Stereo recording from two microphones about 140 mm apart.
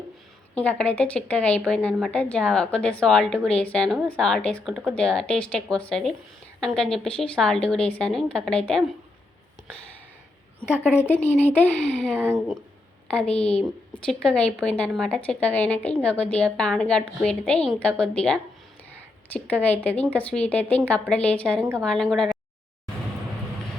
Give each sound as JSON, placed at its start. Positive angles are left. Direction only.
{"t": 0.5, "sound": "a woman's voice", "side_deg": 10}
{"t": 10.9, "sound": "a woman's voice", "side_deg": 15}
{"t": 12.1, "sound": "a woman's voice", "side_deg": -15}
{"t": 13.1, "sound": "a woman's voice", "side_deg": 5}